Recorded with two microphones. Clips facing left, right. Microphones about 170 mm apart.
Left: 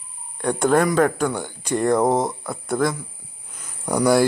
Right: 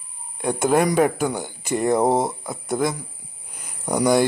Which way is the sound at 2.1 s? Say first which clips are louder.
Even; 25° right (ahead or behind).